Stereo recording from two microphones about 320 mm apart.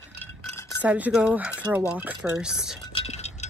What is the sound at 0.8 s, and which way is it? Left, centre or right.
Speech, centre.